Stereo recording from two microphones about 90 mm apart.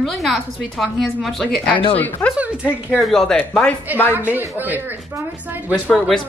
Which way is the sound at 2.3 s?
15° right (ahead or behind).